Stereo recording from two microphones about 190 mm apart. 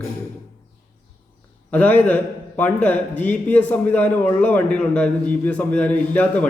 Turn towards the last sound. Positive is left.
turn(degrees=5)  # may be behind; listen again after turning